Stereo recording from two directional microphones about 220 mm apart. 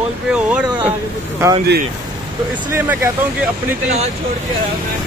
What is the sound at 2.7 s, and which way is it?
Speech, 10° right (ahead or behind).